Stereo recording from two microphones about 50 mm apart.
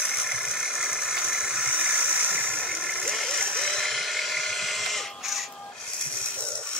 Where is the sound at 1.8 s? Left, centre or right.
Right.